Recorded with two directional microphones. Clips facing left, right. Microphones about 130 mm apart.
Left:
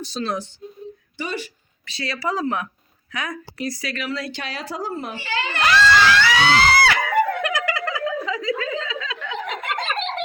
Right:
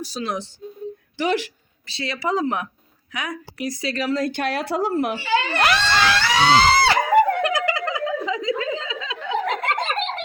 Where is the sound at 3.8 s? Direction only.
35° right (ahead or behind); by 5.7 s 60° right (ahead or behind).